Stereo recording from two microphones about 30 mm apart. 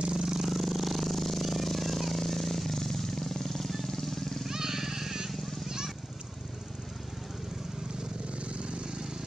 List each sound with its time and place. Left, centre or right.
0.1 s vehicle: right
0.5 s a sound: centre
3.8 s vehicle: centre
4.5 s vehicle: centre
8.4 s vehicle: right